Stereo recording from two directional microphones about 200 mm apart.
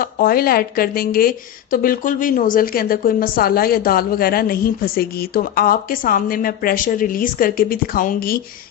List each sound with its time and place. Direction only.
0.0 s speech: 45° left (ahead or behind)